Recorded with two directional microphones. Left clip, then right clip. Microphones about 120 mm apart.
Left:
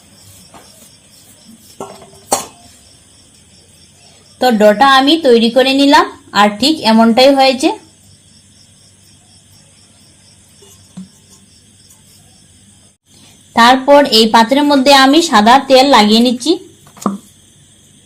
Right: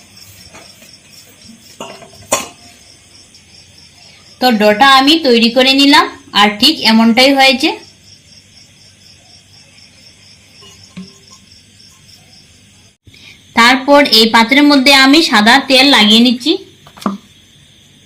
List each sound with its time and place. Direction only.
4.4 s a woman's voice: 55° left (ahead or behind); by 7.7 s 70° left (ahead or behind)
13.6 s speech: 45° left (ahead or behind); by 16.6 s 70° left (ahead or behind)